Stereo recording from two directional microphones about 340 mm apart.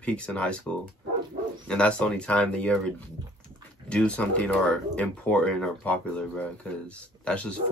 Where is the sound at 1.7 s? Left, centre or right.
Centre.